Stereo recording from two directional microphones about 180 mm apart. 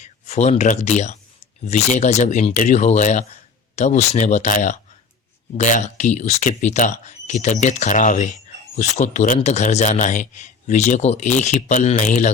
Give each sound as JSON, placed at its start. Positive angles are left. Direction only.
{"t": 0.0, "sound": "a man's voice", "side_deg": 40}